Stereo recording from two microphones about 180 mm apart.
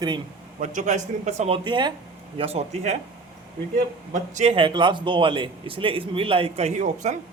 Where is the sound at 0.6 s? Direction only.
40° right (ahead or behind).